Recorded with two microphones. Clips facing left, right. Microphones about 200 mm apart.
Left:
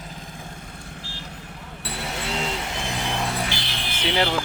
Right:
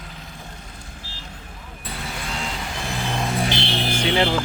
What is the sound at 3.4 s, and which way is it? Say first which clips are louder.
Music: right 7 dB; 25° right (ahead or behind).